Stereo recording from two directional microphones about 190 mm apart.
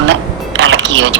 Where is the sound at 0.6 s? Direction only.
75° right (ahead or behind).